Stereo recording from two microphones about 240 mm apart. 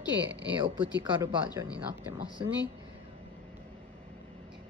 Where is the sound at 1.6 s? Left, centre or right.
Centre.